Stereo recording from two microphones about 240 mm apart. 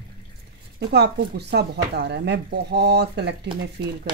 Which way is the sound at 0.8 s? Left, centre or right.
Right.